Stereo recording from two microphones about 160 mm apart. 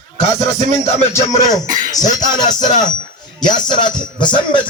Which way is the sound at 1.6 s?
55° right (ahead or behind).